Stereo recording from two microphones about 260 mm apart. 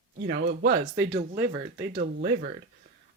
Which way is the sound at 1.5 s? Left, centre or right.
Centre.